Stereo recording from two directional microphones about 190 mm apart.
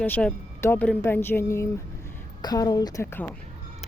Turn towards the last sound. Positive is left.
turn(degrees=10)  # may be behind; listen again after turning